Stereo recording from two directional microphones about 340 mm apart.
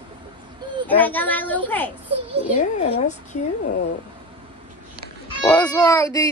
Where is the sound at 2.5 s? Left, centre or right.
Left.